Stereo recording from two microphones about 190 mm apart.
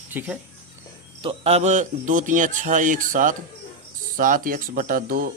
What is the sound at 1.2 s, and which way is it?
A man's voice, 30° right (ahead or behind).